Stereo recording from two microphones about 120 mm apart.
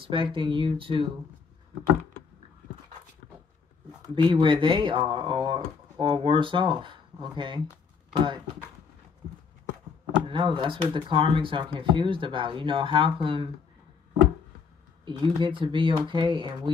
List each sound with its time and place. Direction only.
0.0 s speech: 45° right (ahead or behind)
4.1 s speech: 45° right (ahead or behind)
10.2 s speech: 45° right (ahead or behind)
15.0 s speech: 45° right (ahead or behind)